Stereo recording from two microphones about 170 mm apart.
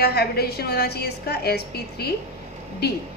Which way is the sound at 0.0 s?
70° left (ahead or behind).